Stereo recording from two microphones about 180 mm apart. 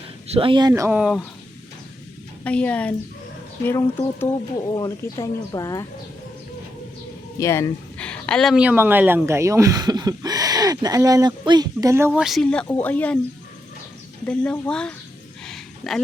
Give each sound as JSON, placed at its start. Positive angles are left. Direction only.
{"t": 0.3, "sound": "speech", "side_deg": -30}
{"t": 0.7, "sound": "speech", "side_deg": -10}
{"t": 2.4, "sound": "speech", "side_deg": 5}
{"t": 7.3, "sound": "speech", "side_deg": 15}
{"t": 7.9, "sound": "speech", "side_deg": 5}
{"t": 12.2, "sound": "speech", "side_deg": 0}
{"t": 14.3, "sound": "speech", "side_deg": 5}
{"t": 15.4, "sound": "a sound", "side_deg": 0}